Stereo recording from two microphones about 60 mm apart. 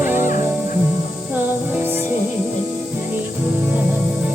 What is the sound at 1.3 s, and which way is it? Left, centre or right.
Music, right.